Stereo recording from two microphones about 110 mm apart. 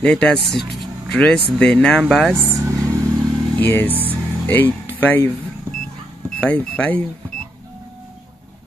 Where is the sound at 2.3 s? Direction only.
25° right (ahead or behind).